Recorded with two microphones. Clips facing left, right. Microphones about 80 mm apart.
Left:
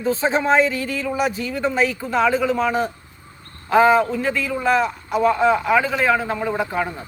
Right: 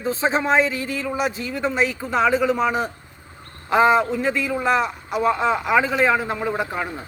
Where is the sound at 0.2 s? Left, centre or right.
Centre.